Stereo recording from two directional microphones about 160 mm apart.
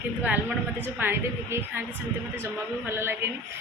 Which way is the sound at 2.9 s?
15° right (ahead or behind).